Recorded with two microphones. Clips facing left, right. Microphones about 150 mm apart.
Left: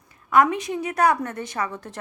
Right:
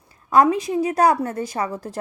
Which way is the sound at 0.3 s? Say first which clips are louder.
Right 3 dB; 35° right (ahead or behind).